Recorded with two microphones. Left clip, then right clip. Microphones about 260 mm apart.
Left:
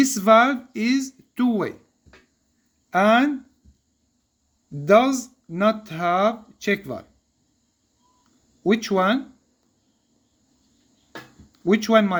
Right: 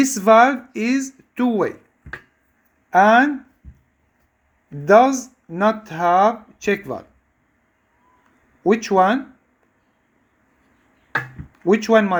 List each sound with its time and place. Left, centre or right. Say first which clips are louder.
0.0 s speech: right 3 dB; centre
2.9 s speech: right 5 dB; centre
4.9 s speech: right 4 dB; centre
8.6 s speech: right 5 dB; centre
11.6 s speech: right 3 dB; centre